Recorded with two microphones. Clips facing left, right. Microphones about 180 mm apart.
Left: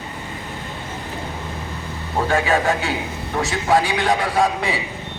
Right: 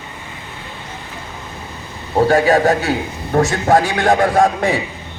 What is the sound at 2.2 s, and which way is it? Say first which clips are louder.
A man's voice: right 7 dB; 35° right (ahead or behind).